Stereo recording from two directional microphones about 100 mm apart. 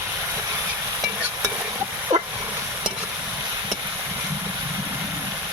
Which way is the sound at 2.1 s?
90° right.